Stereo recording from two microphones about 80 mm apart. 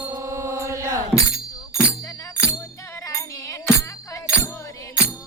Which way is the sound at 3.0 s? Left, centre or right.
Left.